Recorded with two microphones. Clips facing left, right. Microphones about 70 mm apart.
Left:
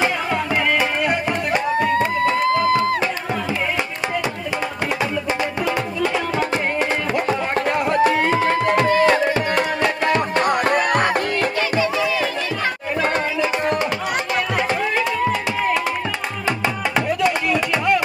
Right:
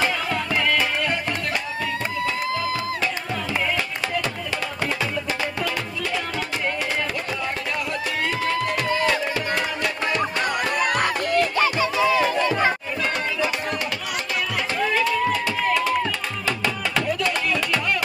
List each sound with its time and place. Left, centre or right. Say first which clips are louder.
0.0 s music: left 3 dB; centre
1.8 s a sound: left 8 dB; left
7.2 s music: left 7 dB; left
11.8 s music: right 1 dB; right
13.0 s music: left 4 dB; left
16.4 s music: left 4 dB; left